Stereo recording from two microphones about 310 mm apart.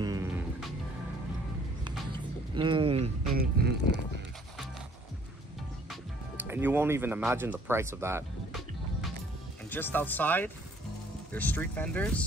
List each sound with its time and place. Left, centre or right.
0.0 s music: centre
2.5 s a sound: centre
3.3 s music: right
5.9 s speech: centre
9.7 s speech: centre